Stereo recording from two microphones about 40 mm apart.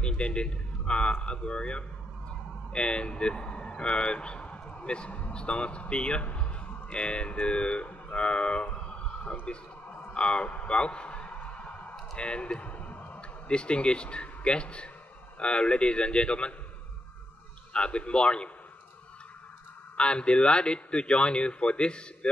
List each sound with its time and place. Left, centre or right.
0.0 s speech: left
10.1 s a sound: left
13.5 s speech: left
17.7 s speech: left
20.0 s speech: left